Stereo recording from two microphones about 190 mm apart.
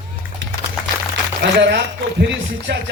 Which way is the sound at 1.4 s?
65° right (ahead or behind).